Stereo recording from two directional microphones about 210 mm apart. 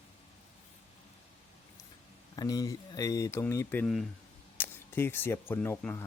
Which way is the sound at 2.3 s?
20° left (ahead or behind).